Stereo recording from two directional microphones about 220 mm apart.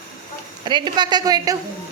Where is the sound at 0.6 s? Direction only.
20° right (ahead or behind).